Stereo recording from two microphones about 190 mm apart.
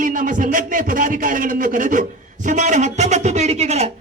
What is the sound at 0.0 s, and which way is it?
A man's voice, 45° right (ahead or behind).